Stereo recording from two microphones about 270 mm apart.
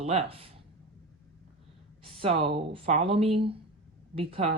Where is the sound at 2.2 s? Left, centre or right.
Centre.